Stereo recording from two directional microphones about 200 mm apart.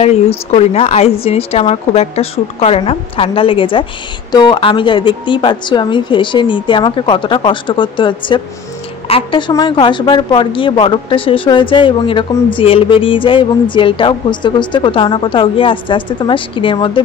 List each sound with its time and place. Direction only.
0.0 s a woman's voice: 30° left (ahead or behind)